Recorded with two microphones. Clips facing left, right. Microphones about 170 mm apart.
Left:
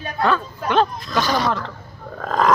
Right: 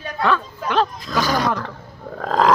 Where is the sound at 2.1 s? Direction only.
25° right (ahead or behind).